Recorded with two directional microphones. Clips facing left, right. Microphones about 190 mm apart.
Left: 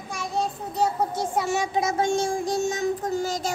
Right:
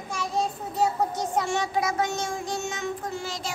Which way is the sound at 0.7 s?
Centre (ahead or behind).